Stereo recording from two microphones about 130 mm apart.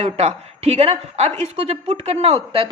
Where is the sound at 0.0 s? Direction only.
55° right (ahead or behind).